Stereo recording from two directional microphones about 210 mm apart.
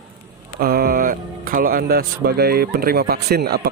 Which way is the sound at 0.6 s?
45° right (ahead or behind).